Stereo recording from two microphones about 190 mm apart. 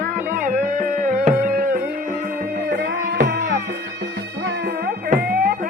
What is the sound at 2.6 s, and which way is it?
Music, 65° right (ahead or behind).